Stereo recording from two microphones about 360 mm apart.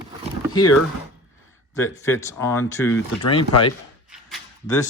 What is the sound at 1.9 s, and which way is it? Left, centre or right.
Speech, centre.